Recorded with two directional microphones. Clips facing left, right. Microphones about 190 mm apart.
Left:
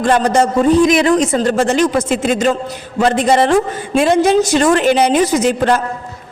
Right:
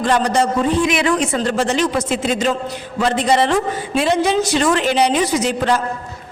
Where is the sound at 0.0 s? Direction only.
50° left (ahead or behind).